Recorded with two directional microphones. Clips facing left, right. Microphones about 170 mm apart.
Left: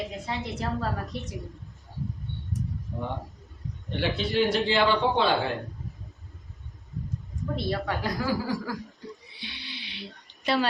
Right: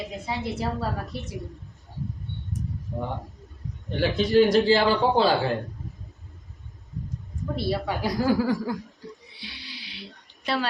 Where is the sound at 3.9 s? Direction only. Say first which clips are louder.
Right 5 dB; 40° right (ahead or behind).